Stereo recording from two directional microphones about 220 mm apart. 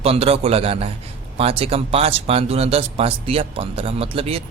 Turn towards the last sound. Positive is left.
turn(degrees=-25)  # may be behind; listen again after turning